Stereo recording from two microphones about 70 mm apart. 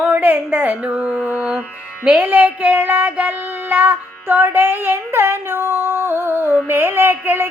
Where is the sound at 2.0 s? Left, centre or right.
Right.